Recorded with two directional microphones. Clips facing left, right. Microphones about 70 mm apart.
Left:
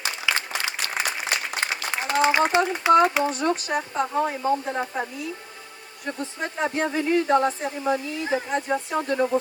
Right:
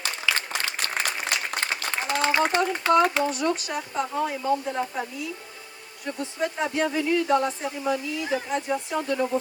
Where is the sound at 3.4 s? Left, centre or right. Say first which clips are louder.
Left 2 dB; left.